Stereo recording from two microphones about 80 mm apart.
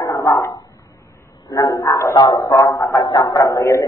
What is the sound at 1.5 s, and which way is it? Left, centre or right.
Music, left.